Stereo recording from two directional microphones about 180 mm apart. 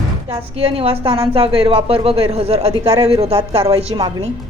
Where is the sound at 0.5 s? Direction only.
35° right (ahead or behind).